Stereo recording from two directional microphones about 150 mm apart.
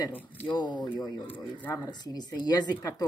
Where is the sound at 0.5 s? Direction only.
30° left (ahead or behind).